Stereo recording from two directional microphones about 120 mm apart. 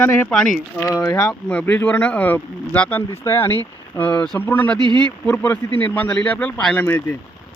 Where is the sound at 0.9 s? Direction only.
25° left (ahead or behind).